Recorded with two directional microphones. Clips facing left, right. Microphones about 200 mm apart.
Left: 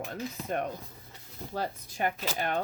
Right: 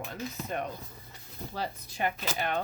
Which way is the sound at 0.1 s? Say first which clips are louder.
Left 2 dB; 50° left (ahead or behind).